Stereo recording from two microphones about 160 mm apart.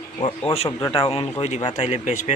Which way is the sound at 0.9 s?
35° left (ahead or behind).